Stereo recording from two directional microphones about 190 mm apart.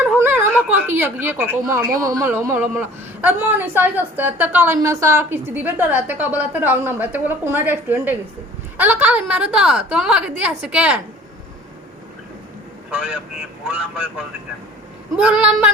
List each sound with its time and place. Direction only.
0.0 s a sound: 10° right (ahead or behind)
0.7 s a woman's voice: 10° right (ahead or behind)
12.9 s a man's voice: 5° right (ahead or behind)
15.1 s a woman's voice: 5° right (ahead or behind)